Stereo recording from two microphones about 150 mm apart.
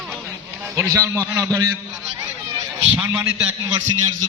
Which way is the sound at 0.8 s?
20° right (ahead or behind).